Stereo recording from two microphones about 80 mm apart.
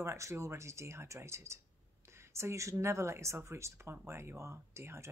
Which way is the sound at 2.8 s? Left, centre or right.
Right.